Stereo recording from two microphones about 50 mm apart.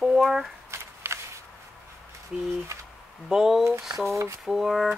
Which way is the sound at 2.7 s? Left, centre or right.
Right.